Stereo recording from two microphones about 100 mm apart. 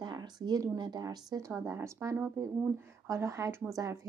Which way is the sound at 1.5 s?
25° right (ahead or behind).